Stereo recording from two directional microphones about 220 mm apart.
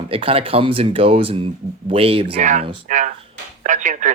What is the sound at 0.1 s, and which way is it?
Speech, 25° right (ahead or behind).